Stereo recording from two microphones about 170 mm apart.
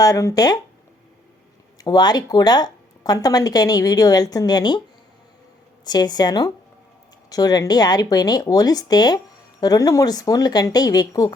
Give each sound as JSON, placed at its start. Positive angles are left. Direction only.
{"t": 0.0, "sound": "speech", "side_deg": 20}
{"t": 1.8, "sound": "speech", "side_deg": 25}
{"t": 5.8, "sound": "speech", "side_deg": 25}